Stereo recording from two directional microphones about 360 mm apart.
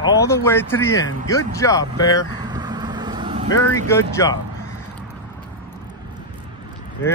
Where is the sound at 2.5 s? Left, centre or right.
Centre.